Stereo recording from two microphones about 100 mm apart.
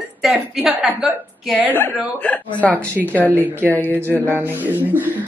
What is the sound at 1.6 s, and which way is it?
A woman's voice, 20° left (ahead or behind).